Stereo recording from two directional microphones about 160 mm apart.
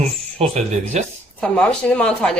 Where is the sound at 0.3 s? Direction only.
45° right (ahead or behind).